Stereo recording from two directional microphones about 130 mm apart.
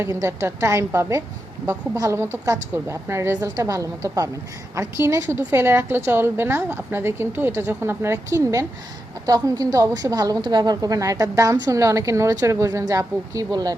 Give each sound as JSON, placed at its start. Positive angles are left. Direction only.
{"t": 0.0, "sound": "a woman's voice", "side_deg": -20}